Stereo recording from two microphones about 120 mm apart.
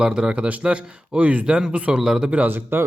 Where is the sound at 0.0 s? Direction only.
5° right (ahead or behind).